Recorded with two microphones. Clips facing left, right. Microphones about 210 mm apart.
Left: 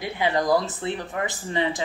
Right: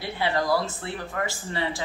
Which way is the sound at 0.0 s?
15° left (ahead or behind).